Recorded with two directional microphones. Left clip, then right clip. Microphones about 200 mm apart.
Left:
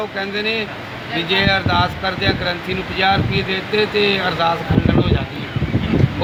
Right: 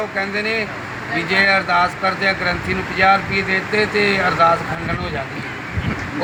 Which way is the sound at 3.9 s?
55° right (ahead or behind).